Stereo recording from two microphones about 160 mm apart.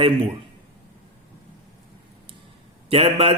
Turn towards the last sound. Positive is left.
turn(degrees=-35)  # may be behind; listen again after turning